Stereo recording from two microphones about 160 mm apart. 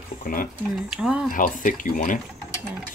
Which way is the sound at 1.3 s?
55° left (ahead or behind).